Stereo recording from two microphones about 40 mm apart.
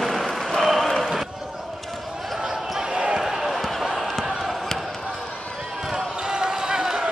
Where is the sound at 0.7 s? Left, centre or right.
Centre.